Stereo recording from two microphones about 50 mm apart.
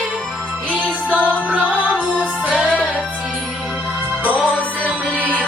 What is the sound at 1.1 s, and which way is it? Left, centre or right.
Music, right.